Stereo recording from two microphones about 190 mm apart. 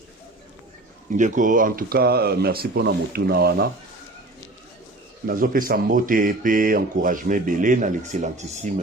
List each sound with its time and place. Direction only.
1.1 s speech: 45° right (ahead or behind)
5.2 s speech: 45° right (ahead or behind)